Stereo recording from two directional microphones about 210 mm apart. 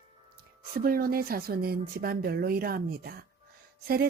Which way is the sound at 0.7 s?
45° right (ahead or behind).